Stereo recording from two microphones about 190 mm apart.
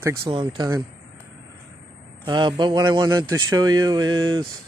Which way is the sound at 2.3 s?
25° right (ahead or behind).